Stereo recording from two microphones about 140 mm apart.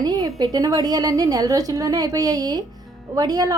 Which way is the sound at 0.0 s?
30° right (ahead or behind).